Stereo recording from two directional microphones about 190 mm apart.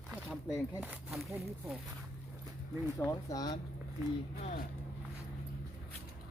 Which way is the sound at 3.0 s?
15° left (ahead or behind).